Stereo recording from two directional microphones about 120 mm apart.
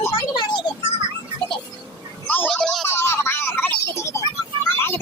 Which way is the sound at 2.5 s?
5° left (ahead or behind).